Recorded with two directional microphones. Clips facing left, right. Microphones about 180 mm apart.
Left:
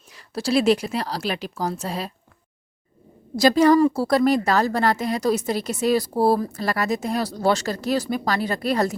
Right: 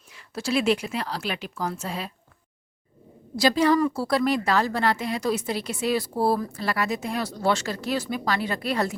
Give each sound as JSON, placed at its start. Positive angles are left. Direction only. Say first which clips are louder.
{"t": 0.1, "sound": "a woman's voice", "louder": "left 4 dB", "side_deg": 35}
{"t": 3.3, "sound": "a woman's voice", "louder": "left 5 dB", "side_deg": 45}